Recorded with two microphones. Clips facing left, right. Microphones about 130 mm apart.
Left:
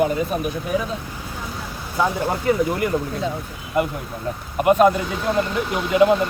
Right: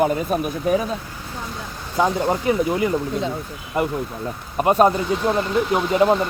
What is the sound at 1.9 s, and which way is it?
Speech, 20° right (ahead or behind).